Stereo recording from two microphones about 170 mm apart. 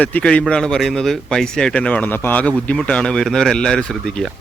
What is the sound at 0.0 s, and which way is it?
Speech, 5° left (ahead or behind).